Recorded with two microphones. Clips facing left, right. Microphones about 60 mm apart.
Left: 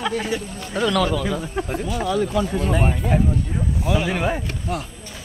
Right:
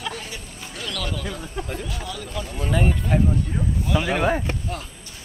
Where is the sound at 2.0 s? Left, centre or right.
Left.